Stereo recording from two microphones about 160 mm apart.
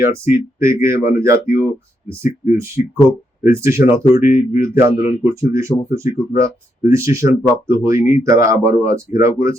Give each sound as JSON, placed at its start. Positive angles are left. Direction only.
{"t": 0.0, "sound": "speech", "side_deg": -20}
{"t": 2.8, "sound": "speech", "side_deg": 50}
{"t": 3.4, "sound": "speech", "side_deg": -15}